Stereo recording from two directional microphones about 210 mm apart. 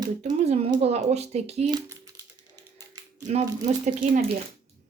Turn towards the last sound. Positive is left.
turn(degrees=-40)  # may be behind; listen again after turning